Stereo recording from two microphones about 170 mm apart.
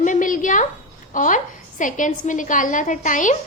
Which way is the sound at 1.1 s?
50° left (ahead or behind).